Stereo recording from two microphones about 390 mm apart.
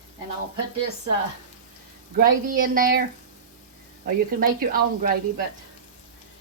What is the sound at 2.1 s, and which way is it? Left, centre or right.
Speech, right.